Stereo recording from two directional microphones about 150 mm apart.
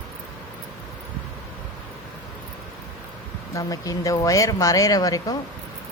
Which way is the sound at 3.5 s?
20° left (ahead or behind).